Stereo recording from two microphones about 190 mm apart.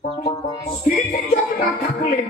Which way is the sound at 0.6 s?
35° left (ahead or behind).